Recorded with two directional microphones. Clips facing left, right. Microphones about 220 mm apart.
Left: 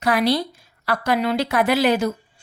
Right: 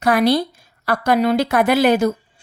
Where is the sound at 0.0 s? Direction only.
50° right (ahead or behind).